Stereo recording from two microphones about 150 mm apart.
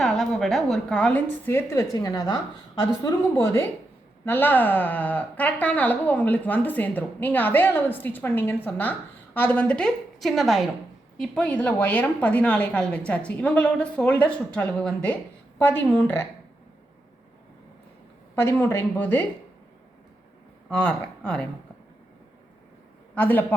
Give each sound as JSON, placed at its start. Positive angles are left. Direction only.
{"t": 0.0, "sound": "a woman's voice", "side_deg": 5}
{"t": 18.3, "sound": "a woman's voice", "side_deg": 15}
{"t": 20.7, "sound": "speech", "side_deg": 5}
{"t": 23.1, "sound": "a woman's voice", "side_deg": 10}